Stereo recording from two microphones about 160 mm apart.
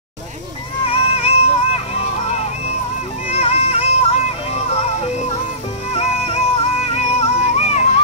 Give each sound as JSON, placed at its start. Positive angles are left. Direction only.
{"t": 0.8, "sound": "music", "side_deg": 35}
{"t": 3.3, "sound": "music", "side_deg": 40}